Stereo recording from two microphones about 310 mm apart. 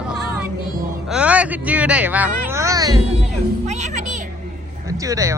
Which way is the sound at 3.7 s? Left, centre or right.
Right.